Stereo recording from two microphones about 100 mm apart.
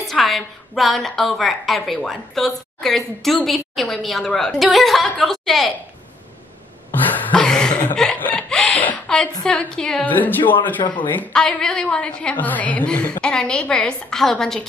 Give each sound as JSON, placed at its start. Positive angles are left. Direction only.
{"t": 0.0, "sound": "a woman's voice", "side_deg": 0}
{"t": 6.9, "sound": "a sound", "side_deg": 15}
{"t": 7.3, "sound": "chuckle", "side_deg": 5}
{"t": 9.4, "sound": "a woman's voice", "side_deg": 10}
{"t": 10.0, "sound": "a woman's voice", "side_deg": 15}
{"t": 11.3, "sound": "a woman's voice", "side_deg": 5}